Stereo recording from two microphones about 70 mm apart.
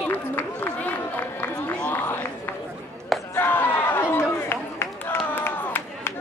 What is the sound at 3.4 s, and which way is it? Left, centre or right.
Run, left.